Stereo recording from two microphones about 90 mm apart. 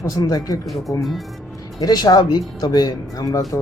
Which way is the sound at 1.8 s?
50° left (ahead or behind).